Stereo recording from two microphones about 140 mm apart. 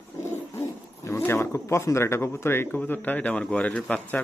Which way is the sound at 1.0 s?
20° left (ahead or behind).